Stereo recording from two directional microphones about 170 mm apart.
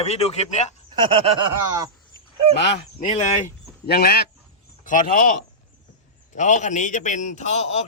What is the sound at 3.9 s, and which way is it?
Speech, 65° left (ahead or behind).